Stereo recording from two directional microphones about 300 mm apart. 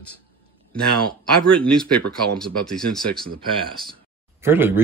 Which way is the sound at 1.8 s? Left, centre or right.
Right.